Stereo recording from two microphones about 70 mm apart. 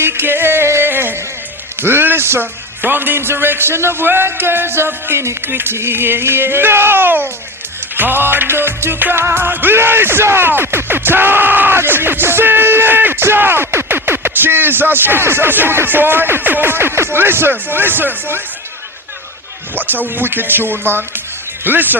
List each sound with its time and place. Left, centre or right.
0.0 s music: right
19.7 s speech: right